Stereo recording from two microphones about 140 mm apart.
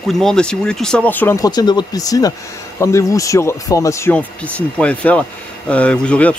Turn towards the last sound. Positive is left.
turn(degrees=5)  # may be behind; listen again after turning